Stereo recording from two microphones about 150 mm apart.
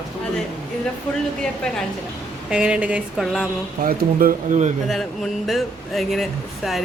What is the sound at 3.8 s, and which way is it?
Speech, 70° right (ahead or behind).